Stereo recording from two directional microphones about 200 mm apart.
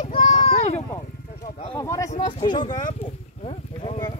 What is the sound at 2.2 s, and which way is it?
Speech, 20° left (ahead or behind).